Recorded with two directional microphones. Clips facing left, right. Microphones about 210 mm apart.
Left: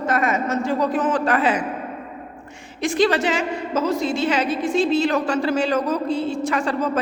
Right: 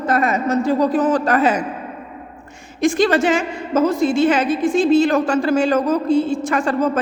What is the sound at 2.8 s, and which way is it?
A woman's voice, 45° right (ahead or behind).